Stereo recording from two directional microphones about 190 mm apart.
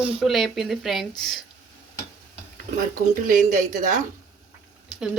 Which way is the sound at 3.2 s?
45° right (ahead or behind).